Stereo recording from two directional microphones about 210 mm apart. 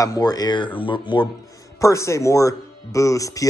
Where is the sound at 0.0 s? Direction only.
15° left (ahead or behind).